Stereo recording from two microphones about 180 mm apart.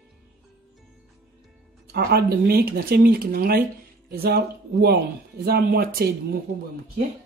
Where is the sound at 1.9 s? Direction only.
60° right (ahead or behind).